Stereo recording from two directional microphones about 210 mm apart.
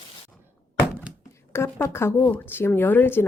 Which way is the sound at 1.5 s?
10° left (ahead or behind).